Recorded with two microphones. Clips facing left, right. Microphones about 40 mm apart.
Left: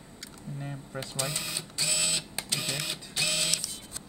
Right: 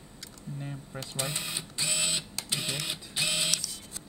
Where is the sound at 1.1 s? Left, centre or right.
Right.